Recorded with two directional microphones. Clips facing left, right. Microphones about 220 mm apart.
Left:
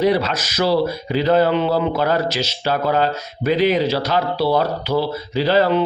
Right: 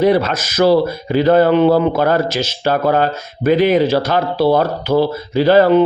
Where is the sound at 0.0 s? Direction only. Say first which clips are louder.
Right 4 dB; 50° right (ahead or behind).